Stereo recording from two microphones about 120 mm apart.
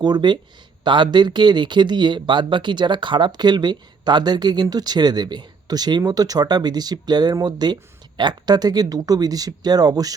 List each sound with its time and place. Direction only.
0.0 s speech: 35° right (ahead or behind)